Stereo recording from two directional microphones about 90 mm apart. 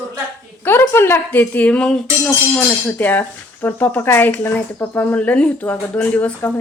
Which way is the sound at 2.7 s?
20° left (ahead or behind).